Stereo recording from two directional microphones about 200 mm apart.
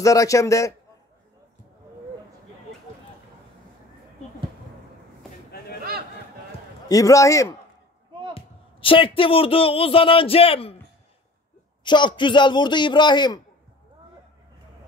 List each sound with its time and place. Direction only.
0.0 s a man's voice: 15° left (ahead or behind)
6.9 s a man's voice: 15° left (ahead or behind)
8.4 s speech: 25° left (ahead or behind)
11.8 s a man's voice: 25° left (ahead or behind)